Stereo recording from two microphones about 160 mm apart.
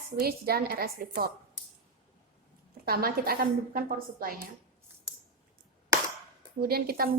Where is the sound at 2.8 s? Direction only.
70° right (ahead or behind).